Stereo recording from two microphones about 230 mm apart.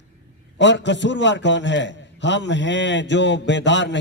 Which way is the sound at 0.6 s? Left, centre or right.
Left.